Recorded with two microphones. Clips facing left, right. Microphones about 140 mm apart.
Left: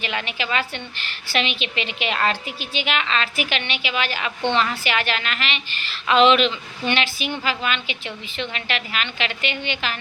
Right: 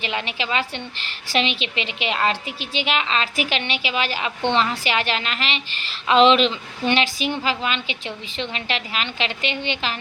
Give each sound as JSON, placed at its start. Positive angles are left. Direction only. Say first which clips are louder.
{"t": 0.0, "sound": "a woman's voice", "louder": "right 1 dB", "side_deg": -30}